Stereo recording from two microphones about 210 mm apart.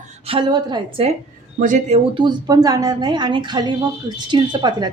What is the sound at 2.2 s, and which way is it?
Speech, 20° right (ahead or behind).